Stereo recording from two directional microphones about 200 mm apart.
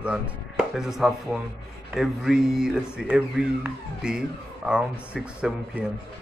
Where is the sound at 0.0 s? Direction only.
5° right (ahead or behind).